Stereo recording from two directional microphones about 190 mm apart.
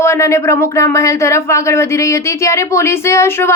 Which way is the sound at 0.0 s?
15° left (ahead or behind).